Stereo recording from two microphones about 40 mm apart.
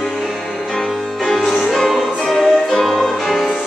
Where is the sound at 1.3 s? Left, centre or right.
Centre.